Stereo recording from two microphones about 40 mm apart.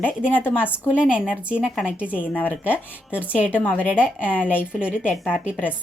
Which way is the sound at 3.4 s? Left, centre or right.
Left.